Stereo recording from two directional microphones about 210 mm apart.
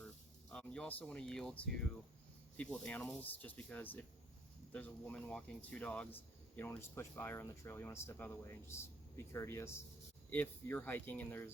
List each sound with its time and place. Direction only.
0.5 s speech: 5° left (ahead or behind)